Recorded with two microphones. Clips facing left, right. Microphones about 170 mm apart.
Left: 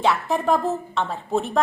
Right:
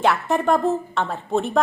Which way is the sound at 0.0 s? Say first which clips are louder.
Right 2 dB; centre (ahead or behind).